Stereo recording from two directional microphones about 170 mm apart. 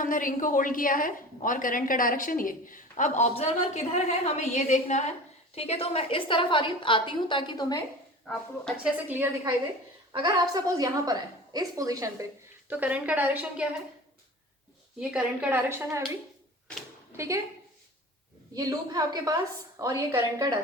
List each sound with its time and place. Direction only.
0.0 s a woman's voice: 55° left (ahead or behind); by 7.8 s 25° left (ahead or behind)
8.3 s a woman's voice: 5° left (ahead or behind)
9.0 s speech: 10° right (ahead or behind)
10.1 s a woman's voice: 25° right (ahead or behind)
12.6 s speech: 10° right (ahead or behind)
14.9 s speech: 5° right (ahead or behind)
17.2 s speech: 15° right (ahead or behind)
18.5 s a woman's voice: 25° right (ahead or behind)